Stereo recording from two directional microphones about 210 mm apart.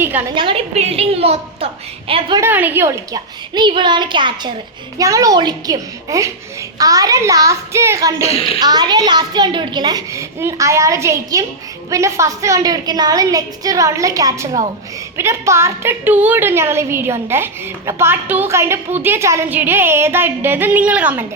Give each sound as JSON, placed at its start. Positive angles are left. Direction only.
{"t": 0.0, "sound": "a woman's voice", "side_deg": -10}
{"t": 0.3, "sound": "a woman's voice", "side_deg": -25}
{"t": 2.4, "sound": "a woman's voice", "side_deg": -10}
{"t": 8.2, "sound": "a woman's voice", "side_deg": 30}
{"t": 8.5, "sound": "a woman's voice", "side_deg": -20}